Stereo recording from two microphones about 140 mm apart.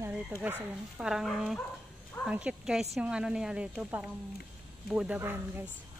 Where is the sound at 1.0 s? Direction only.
5° right (ahead or behind).